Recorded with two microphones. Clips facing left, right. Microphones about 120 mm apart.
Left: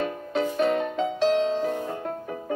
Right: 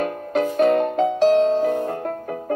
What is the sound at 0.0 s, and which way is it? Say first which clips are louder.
Music: right 5 dB; 50° right (ahead or behind).